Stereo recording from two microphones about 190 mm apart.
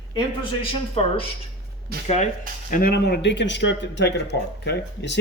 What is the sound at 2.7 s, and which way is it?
Speech, 50° left (ahead or behind).